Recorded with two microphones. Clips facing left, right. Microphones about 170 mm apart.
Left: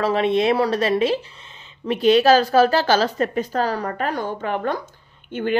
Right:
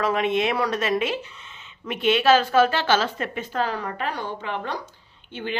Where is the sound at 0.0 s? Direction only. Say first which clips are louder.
Left 4 dB; 35° left (ahead or behind).